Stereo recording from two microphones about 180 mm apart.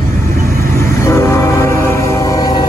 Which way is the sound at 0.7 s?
15° left (ahead or behind).